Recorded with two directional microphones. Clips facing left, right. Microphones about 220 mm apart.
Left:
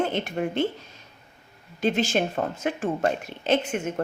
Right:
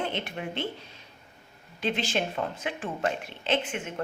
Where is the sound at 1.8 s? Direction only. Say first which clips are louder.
Left 6 dB; 45° left (ahead or behind).